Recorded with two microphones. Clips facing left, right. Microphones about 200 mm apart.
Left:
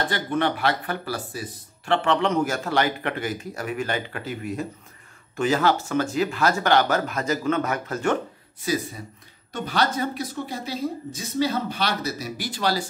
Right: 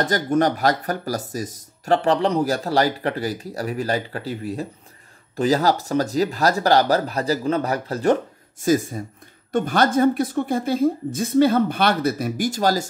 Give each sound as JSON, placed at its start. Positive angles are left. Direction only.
{"t": 0.0, "sound": "speech", "side_deg": -40}